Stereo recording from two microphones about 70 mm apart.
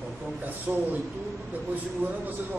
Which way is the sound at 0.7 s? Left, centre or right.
Right.